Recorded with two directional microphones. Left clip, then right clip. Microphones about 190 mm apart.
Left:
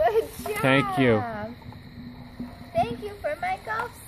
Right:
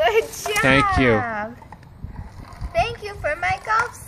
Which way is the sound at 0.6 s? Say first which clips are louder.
Right 5 dB; centre (ahead or behind).